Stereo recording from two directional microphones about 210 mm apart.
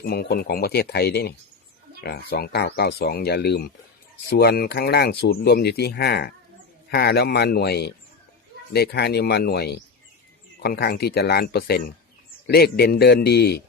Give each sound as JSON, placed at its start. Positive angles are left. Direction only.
{"t": 0.0, "sound": "speech", "side_deg": 50}